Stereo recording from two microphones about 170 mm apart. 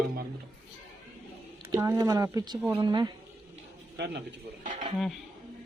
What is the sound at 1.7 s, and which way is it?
Speech, 20° right (ahead or behind).